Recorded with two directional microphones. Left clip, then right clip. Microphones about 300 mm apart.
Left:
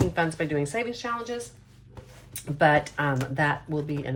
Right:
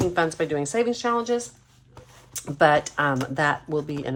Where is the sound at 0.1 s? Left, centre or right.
Centre.